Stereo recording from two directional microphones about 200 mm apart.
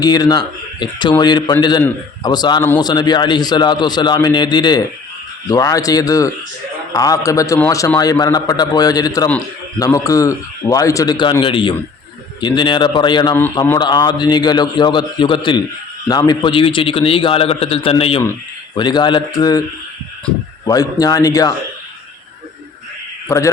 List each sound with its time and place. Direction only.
0.0 s a man's voice: 20° left (ahead or behind)
20.7 s a man's voice: 20° left (ahead or behind)